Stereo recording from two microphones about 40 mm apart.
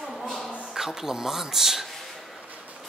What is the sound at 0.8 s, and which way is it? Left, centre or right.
Speech, centre.